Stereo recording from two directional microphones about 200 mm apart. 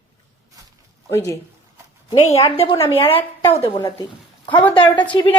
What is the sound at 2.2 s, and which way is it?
A woman's voice, 30° left (ahead or behind).